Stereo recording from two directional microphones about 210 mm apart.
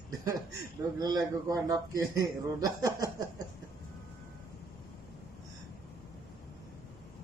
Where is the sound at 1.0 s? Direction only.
15° right (ahead or behind).